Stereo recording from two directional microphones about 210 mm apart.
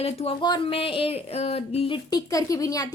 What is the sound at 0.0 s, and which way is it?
A woman's voice, 25° left (ahead or behind).